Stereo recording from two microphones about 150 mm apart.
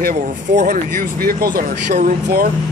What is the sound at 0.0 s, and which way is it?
Speech, 60° right (ahead or behind).